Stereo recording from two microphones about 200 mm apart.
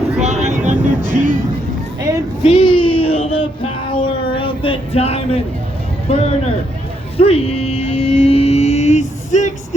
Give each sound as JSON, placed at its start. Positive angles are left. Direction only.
{"t": 0.2, "sound": "vehicle", "side_deg": -35}
{"t": 2.4, "sound": "a sound", "side_deg": 25}
{"t": 6.1, "sound": "speech", "side_deg": 30}
{"t": 7.2, "sound": "music", "side_deg": 30}